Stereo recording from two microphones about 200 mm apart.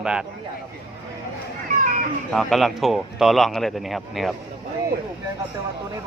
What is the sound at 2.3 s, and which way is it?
A man's voice, centre (ahead or behind).